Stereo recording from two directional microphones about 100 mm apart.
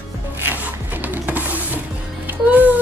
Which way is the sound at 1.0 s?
15° right (ahead or behind).